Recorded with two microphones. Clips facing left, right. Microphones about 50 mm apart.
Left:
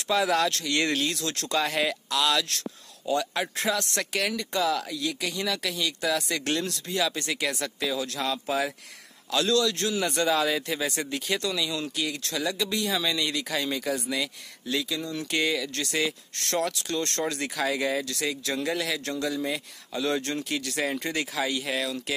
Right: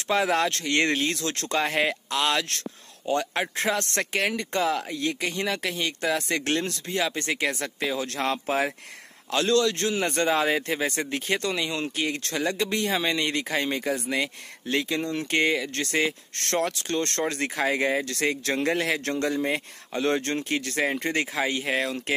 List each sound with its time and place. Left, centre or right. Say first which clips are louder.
0.1 s speech: right 1 dB; right
15.3 s speech: right 3 dB; right
18.1 s speech: right 4 dB; right